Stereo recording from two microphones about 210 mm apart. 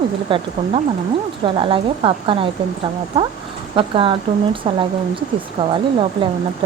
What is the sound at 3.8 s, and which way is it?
A woman's voice, 25° right (ahead or behind).